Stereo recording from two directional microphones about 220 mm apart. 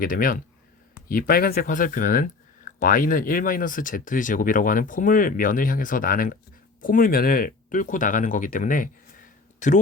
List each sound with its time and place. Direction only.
0.0 s speech: 40° left (ahead or behind)